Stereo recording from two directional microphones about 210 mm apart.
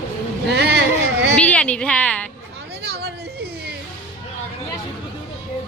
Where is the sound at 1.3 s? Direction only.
5° left (ahead or behind).